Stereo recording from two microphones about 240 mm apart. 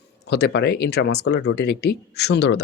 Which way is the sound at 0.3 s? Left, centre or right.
Left.